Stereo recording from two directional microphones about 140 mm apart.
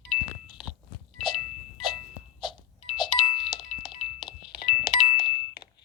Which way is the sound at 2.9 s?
35° left (ahead or behind).